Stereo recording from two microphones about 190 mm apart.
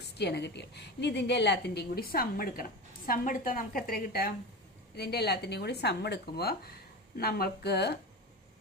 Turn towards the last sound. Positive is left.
turn(degrees=60)  # may be behind; listen again after turning